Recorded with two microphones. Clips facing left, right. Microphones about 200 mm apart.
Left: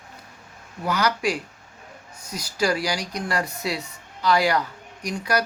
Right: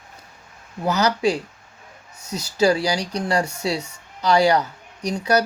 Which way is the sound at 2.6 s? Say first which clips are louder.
Right 5 dB; 30° right (ahead or behind).